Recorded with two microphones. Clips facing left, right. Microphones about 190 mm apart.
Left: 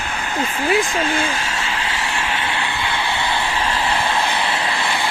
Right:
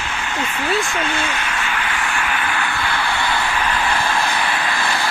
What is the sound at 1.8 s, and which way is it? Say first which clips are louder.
Vehicle: right 1 dB; 25° left (ahead or behind).